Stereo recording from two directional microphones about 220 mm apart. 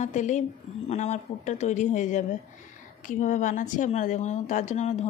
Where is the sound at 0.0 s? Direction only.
35° left (ahead or behind).